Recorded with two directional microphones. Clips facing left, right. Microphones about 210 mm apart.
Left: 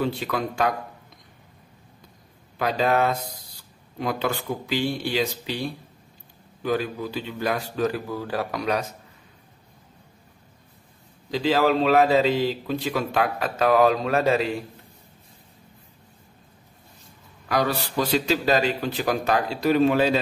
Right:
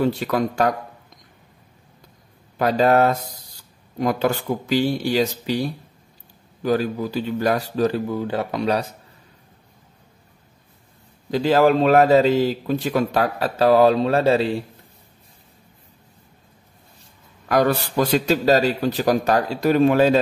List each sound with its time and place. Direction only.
0.0 s a man's voice: 45° right (ahead or behind)
2.6 s a man's voice: 45° right (ahead or behind)
8.1 s speech: 25° right (ahead or behind)
11.2 s a man's voice: 45° right (ahead or behind); by 14.6 s 30° right (ahead or behind)
17.5 s a man's voice: 50° right (ahead or behind)